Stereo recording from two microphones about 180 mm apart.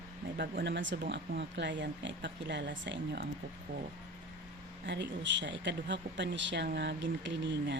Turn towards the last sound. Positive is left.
turn(degrees=-75)  # may be behind; listen again after turning